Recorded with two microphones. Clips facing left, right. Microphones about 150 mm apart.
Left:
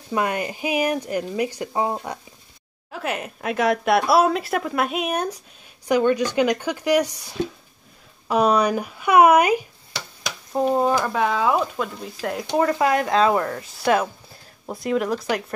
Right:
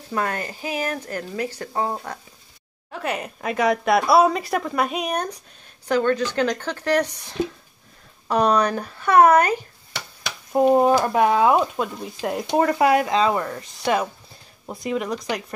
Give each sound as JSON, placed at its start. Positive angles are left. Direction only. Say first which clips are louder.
{"t": 0.1, "sound": "speech", "louder": "left 2 dB", "side_deg": 15}
{"t": 2.9, "sound": "speech", "louder": "even", "side_deg": 0}
{"t": 10.5, "sound": "speech", "louder": "right 4 dB", "side_deg": -15}
{"t": 12.8, "sound": "speech", "louder": "even", "side_deg": -5}